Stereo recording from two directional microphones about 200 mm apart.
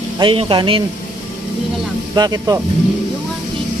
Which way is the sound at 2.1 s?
20° right (ahead or behind).